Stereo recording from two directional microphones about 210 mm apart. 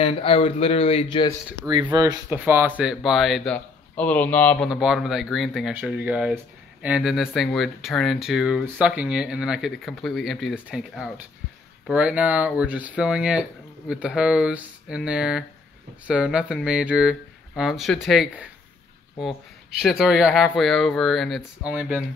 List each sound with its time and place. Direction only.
0.0 s speech: 25° left (ahead or behind)
1.7 s speech: 20° right (ahead or behind); by 18.5 s 5° right (ahead or behind)
19.8 s speech: centre (ahead or behind)